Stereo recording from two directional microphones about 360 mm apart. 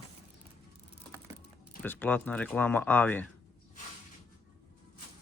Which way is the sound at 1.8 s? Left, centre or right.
Centre.